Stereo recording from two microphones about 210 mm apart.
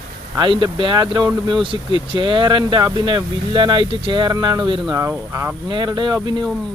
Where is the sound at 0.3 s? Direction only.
20° right (ahead or behind).